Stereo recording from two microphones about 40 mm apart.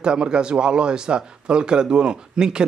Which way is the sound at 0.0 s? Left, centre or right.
Right.